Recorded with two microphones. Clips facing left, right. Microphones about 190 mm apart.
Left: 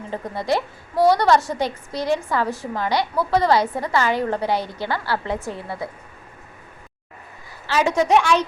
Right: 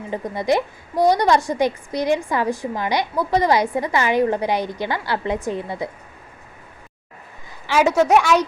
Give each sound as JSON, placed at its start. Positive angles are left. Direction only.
{"t": 0.1, "sound": "a woman's voice", "side_deg": -15}
{"t": 7.7, "sound": "a woman's voice", "side_deg": -15}